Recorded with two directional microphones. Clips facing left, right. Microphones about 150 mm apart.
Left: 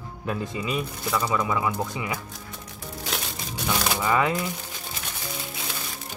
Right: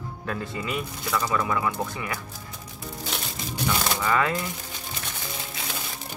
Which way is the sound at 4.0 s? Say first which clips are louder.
Left 2 dB; 15° left (ahead or behind).